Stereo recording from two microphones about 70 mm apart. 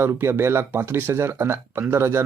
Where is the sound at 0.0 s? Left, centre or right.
Right.